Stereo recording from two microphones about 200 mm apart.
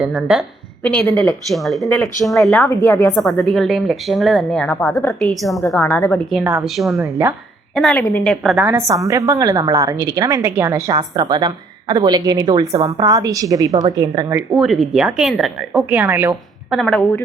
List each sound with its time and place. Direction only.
0.0 s a woman's voice: centre (ahead or behind)
3.2 s a woman's voice: centre (ahead or behind)
5.5 s a woman's voice: 15° left (ahead or behind)
6.4 s a woman's voice: 10° right (ahead or behind)
7.1 s a woman's voice: 10° right (ahead or behind)
7.8 s a woman's voice: centre (ahead or behind)
8.9 s a woman's voice: 15° right (ahead or behind)
14.5 s a woman's voice: centre (ahead or behind)
16.6 s a woman's voice: centre (ahead or behind)